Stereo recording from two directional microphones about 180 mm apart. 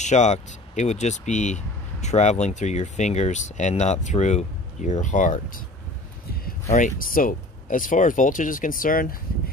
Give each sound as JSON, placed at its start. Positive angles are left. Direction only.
{"t": 0.0, "sound": "speech", "side_deg": 40}
{"t": 6.7, "sound": "speech", "side_deg": 45}